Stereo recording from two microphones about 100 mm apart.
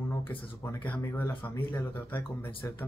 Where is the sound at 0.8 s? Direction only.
15° left (ahead or behind).